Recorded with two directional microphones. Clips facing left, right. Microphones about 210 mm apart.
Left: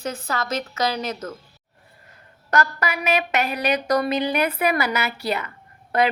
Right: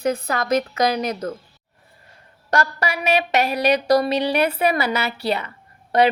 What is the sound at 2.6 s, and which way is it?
A woman's voice, 30° right (ahead or behind).